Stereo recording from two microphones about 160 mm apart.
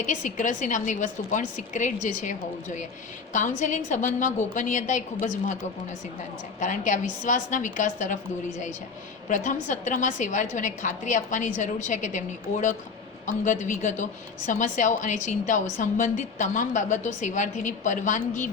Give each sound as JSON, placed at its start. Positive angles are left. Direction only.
{"t": 0.0, "sound": "a woman's voice", "side_deg": 50}
{"t": 6.6, "sound": "a woman's voice", "side_deg": 50}
{"t": 9.3, "sound": "a woman's voice", "side_deg": 50}